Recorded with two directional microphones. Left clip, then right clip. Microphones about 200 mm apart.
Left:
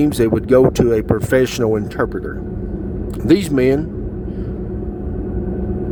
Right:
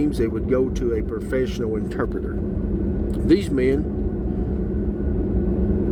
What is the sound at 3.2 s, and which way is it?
Speech, 20° left (ahead or behind).